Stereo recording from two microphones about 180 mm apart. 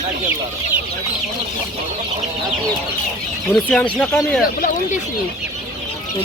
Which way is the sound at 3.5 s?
5° left (ahead or behind).